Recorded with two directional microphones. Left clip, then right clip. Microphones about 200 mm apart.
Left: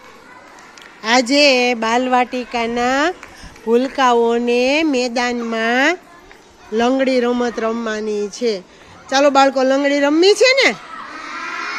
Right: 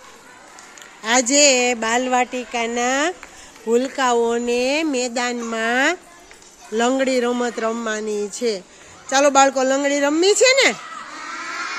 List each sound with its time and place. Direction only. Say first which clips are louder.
1.0 s a man's voice: left 3 dB; 5° right (ahead or behind)